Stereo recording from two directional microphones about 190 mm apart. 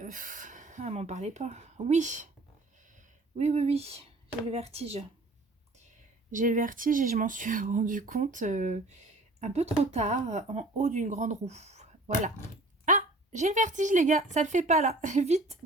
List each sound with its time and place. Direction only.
0.0 s speech: 45° right (ahead or behind)
3.3 s speech: 35° right (ahead or behind)
6.3 s speech: 45° right (ahead or behind)